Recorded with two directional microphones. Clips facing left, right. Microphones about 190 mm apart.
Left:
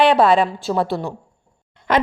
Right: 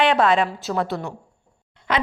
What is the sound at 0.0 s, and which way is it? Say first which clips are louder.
A woman's voice: left 4 dB; 35° left (ahead or behind).